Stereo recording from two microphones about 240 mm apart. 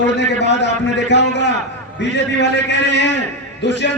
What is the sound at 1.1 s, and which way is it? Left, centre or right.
A man's voice, left.